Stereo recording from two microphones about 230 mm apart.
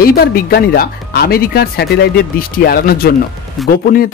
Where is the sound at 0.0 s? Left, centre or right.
Left.